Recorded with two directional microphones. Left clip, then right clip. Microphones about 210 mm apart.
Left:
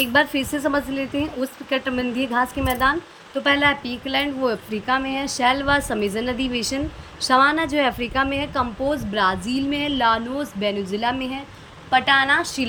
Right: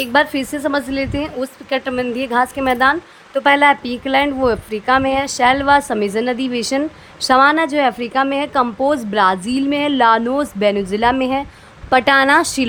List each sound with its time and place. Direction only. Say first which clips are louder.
0.0 s a woman's voice: right 3 dB; 5° right (ahead or behind)